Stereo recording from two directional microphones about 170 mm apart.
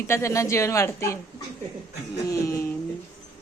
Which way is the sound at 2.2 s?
15° left (ahead or behind).